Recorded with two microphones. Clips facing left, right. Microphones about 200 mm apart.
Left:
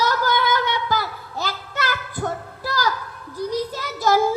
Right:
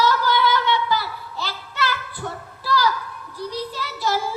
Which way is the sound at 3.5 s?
45° left (ahead or behind).